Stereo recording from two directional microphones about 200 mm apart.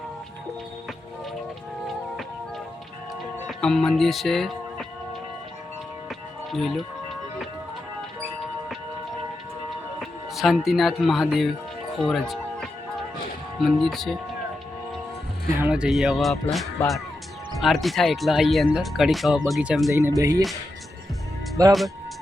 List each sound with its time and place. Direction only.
3.4 s speech: 5° left (ahead or behind)
6.1 s music: centre (ahead or behind)
10.0 s speech: centre (ahead or behind)
15.6 s speech: 5° right (ahead or behind)
19.9 s speech: 15° right (ahead or behind)
21.6 s speech: 15° right (ahead or behind)